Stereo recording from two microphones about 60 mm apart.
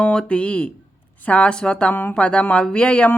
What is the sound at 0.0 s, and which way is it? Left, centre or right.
A woman's voice, centre.